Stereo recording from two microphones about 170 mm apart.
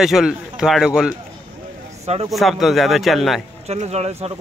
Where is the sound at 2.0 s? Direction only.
35° right (ahead or behind).